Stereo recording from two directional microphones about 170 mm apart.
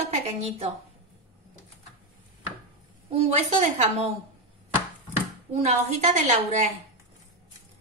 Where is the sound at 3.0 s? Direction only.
40° right (ahead or behind).